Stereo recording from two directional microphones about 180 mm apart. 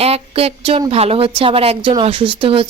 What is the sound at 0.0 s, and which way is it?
A woman's voice, 35° right (ahead or behind).